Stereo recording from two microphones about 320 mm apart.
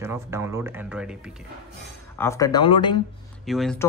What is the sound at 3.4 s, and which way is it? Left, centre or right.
Speech, centre.